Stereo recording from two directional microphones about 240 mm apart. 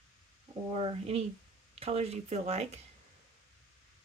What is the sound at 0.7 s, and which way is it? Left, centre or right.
Speech, right.